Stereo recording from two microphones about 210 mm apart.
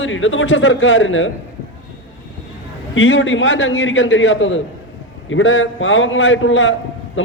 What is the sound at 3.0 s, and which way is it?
A man's voice, 70° left (ahead or behind).